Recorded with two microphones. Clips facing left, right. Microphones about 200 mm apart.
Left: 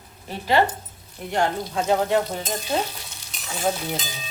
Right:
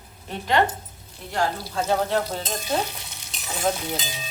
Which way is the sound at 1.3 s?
20° left (ahead or behind).